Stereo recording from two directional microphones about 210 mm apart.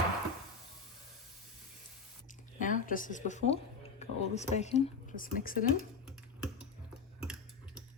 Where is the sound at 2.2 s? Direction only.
40° left (ahead or behind).